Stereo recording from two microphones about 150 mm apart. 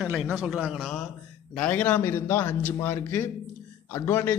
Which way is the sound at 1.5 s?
10° left (ahead or behind).